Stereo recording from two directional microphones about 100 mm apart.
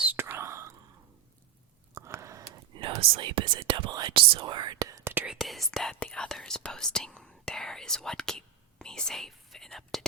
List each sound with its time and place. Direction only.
0.0 s whispering: 20° right (ahead or behind)
2.0 s a sound: 30° right (ahead or behind)
3.0 s speech: 60° right (ahead or behind); by 5.1 s 35° right (ahead or behind)
5.3 s speech: centre (ahead or behind)